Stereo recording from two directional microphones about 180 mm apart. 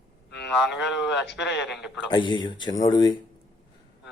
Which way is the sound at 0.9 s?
75° left (ahead or behind).